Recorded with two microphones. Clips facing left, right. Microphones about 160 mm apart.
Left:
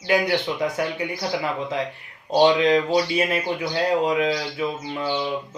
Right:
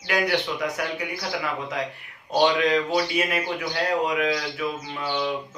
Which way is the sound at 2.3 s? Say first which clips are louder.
Left 4 dB; 25° left (ahead or behind).